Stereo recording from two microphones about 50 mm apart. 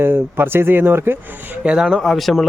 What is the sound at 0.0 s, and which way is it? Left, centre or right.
Speech, right.